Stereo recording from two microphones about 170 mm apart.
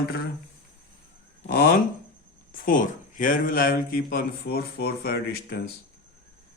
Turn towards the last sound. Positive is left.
turn(degrees=65)  # may be behind; listen again after turning